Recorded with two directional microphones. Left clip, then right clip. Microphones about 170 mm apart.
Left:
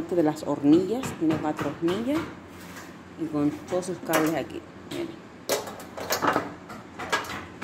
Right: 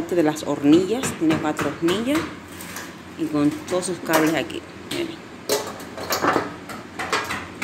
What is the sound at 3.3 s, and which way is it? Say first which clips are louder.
Speech: right 5 dB; 10° left (ahead or behind).